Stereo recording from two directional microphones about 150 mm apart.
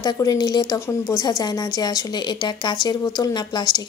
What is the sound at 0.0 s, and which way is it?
A woman's voice, 25° left (ahead or behind).